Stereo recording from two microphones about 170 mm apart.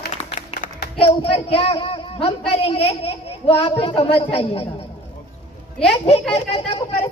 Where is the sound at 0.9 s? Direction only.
35° left (ahead or behind).